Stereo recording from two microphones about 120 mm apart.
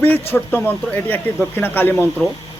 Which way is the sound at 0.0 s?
15° left (ahead or behind).